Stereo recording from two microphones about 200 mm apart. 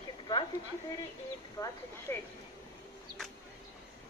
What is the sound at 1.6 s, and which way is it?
Speech, 20° left (ahead or behind).